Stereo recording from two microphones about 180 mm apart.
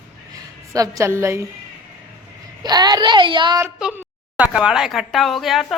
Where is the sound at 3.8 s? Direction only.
5° right (ahead or behind).